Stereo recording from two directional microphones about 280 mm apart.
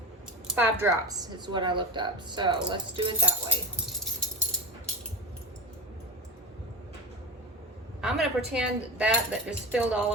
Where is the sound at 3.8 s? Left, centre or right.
Centre.